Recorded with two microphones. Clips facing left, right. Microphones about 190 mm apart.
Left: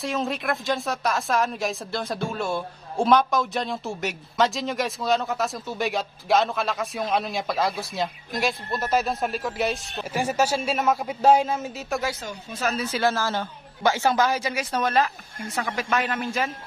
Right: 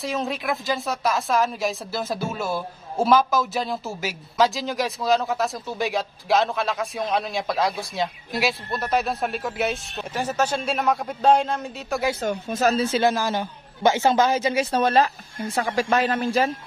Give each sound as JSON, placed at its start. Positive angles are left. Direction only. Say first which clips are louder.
{"t": 0.0, "sound": "a man's voice", "louder": "even", "side_deg": 0}
{"t": 12.2, "sound": "speech", "louder": "right 8 dB", "side_deg": -55}
{"t": 12.7, "sound": "a man's voice", "louder": "right 4 dB", "side_deg": -25}
{"t": 13.1, "sound": "a man's voice", "louder": "right 2 dB", "side_deg": -15}